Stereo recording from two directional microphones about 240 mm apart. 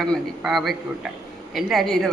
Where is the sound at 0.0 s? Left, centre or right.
Centre.